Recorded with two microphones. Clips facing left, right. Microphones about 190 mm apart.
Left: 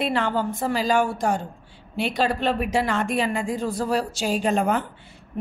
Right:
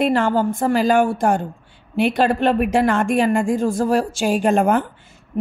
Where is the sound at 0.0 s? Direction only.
45° right (ahead or behind).